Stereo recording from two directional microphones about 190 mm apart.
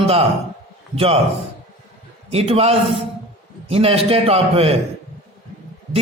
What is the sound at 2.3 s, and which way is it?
A man's voice, 35° right (ahead or behind).